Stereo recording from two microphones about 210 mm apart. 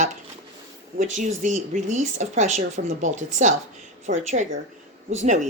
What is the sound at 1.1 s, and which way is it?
Speech, 35° right (ahead or behind).